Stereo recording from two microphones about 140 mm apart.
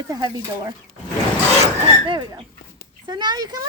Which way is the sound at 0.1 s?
25° right (ahead or behind).